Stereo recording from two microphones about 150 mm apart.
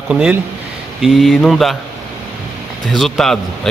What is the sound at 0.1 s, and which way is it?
Speech, 5° right (ahead or behind).